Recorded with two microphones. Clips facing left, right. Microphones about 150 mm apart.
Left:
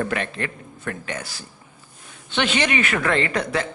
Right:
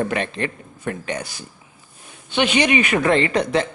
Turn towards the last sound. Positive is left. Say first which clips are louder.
# right 4 dB
turn(degrees=-20)  # may be behind; listen again after turning